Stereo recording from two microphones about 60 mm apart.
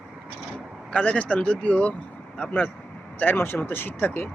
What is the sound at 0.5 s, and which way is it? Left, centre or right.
Speech, left.